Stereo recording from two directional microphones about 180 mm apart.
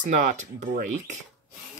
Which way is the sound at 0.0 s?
45° right (ahead or behind).